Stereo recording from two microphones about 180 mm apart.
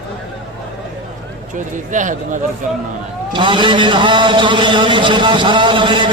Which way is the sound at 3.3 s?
25° right (ahead or behind).